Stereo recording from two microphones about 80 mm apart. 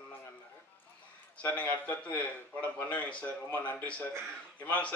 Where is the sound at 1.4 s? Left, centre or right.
Centre.